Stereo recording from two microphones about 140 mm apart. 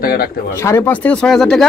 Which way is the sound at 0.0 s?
90° left.